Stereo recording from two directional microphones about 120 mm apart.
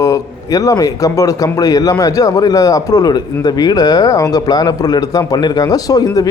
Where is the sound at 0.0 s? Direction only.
30° left (ahead or behind).